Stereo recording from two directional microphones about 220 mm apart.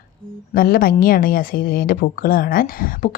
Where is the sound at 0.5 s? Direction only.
40° left (ahead or behind).